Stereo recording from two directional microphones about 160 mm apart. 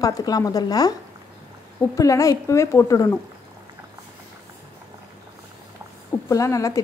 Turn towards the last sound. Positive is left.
turn(degrees=20)  # may be behind; listen again after turning